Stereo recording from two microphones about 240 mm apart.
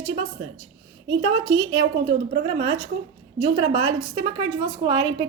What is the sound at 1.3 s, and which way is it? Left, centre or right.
A woman's voice, centre.